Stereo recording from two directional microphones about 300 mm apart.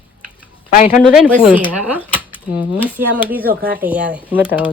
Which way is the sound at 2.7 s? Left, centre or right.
Centre.